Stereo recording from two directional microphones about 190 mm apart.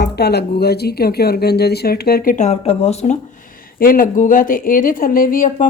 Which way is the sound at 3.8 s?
50° left (ahead or behind).